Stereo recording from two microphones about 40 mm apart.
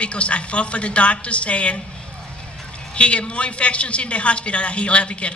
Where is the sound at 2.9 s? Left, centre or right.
Left.